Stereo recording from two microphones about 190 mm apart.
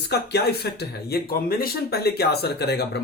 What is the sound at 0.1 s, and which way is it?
Speech, 60° left (ahead or behind).